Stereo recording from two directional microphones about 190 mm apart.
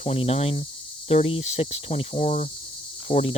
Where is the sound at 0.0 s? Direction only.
35° left (ahead or behind).